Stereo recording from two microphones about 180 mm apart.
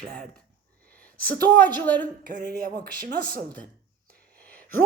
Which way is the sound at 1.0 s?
10° left (ahead or behind).